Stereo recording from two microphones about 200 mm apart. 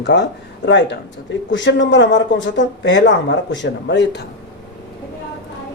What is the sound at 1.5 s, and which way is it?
Speech, 65° left (ahead or behind).